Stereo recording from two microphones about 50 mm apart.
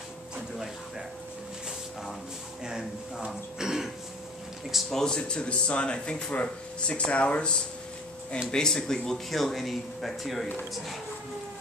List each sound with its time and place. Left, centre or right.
2.6 s speech: centre
4.8 s speech: centre